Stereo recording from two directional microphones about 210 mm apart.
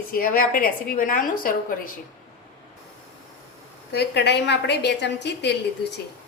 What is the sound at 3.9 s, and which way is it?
A woman's voice, 50° left (ahead or behind).